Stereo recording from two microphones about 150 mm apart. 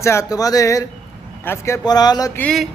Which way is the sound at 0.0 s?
20° left (ahead or behind).